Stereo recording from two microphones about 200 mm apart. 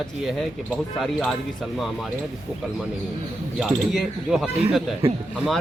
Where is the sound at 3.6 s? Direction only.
Centre (ahead or behind).